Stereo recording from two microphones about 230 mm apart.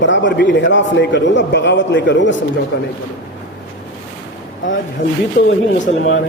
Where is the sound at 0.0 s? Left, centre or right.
Left.